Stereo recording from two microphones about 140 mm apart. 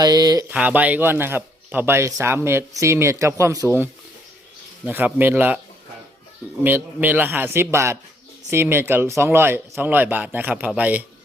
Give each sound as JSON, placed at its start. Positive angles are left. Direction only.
{"t": 0.0, "sound": "speech", "side_deg": -30}
{"t": 0.5, "sound": "speech", "side_deg": -10}
{"t": 4.9, "sound": "speech", "side_deg": -10}
{"t": 6.6, "sound": "speech", "side_deg": -15}